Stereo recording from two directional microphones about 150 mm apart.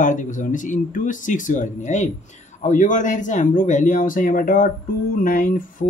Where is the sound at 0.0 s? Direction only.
60° left (ahead or behind).